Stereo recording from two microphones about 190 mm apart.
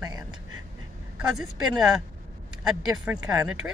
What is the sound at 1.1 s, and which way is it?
Speech, 5° right (ahead or behind).